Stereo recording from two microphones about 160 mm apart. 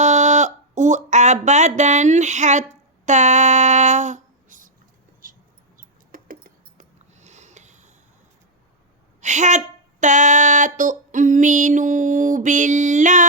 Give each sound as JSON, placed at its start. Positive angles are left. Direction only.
{"t": 0.0, "sound": "speech", "side_deg": -45}
{"t": 3.1, "sound": "a sound", "side_deg": -45}
{"t": 9.2, "sound": "speech", "side_deg": -50}